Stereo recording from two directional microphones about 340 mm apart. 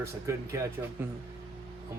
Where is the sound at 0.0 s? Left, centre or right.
Centre.